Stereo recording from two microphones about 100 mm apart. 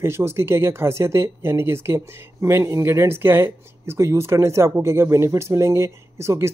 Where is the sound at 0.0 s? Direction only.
25° right (ahead or behind).